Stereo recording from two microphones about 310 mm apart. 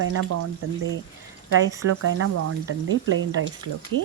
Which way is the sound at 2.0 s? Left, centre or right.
Right.